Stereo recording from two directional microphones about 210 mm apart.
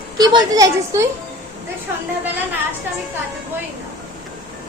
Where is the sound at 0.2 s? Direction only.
20° right (ahead or behind).